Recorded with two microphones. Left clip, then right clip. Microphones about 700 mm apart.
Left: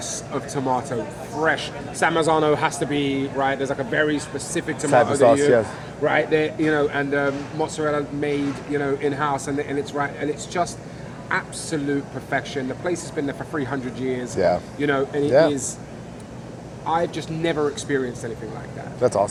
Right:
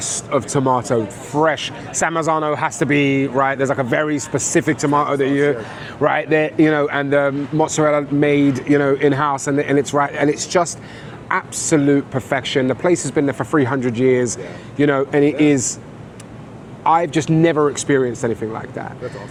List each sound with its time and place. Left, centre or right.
0.3 s speech: right
16.8 s speech: right